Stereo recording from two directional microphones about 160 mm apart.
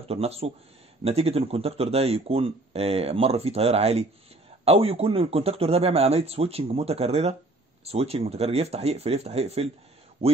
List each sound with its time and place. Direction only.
0.1 s speech: 40° right (ahead or behind)